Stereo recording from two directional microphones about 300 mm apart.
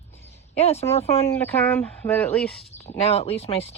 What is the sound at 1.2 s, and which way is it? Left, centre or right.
Speech, centre.